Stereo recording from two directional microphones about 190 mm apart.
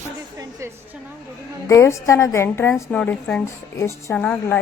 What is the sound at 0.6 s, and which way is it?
Speech, 15° right (ahead or behind).